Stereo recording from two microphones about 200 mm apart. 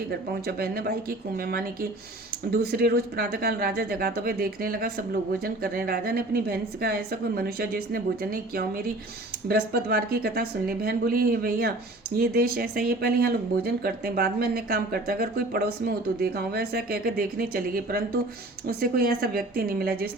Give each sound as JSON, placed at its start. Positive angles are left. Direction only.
{"t": 0.1, "sound": "speech", "side_deg": -50}